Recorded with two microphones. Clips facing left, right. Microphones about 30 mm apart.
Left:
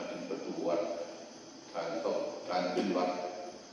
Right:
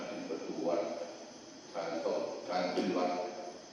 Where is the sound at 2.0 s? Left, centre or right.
Centre.